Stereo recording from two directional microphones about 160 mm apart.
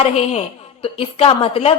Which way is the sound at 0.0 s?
40° left (ahead or behind).